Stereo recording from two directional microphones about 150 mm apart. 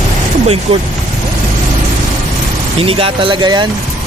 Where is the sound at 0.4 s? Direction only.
40° right (ahead or behind).